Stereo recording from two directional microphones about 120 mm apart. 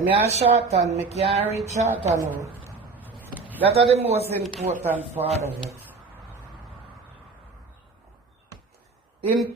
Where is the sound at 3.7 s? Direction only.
60° right (ahead or behind).